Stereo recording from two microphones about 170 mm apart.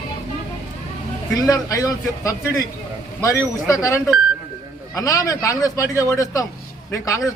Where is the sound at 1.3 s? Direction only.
20° left (ahead or behind).